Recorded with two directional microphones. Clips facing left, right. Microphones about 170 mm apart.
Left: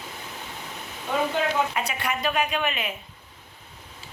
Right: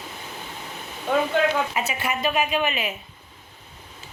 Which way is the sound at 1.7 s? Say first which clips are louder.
Right 2 dB; 5° right (ahead or behind).